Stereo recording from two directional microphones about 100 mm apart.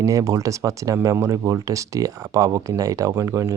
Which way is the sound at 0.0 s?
35° right (ahead or behind).